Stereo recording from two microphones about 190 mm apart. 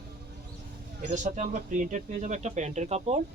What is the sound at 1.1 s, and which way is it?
Speech, 40° right (ahead or behind).